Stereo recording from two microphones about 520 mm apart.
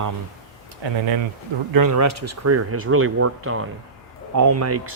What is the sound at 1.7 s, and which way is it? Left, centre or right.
Speech, right.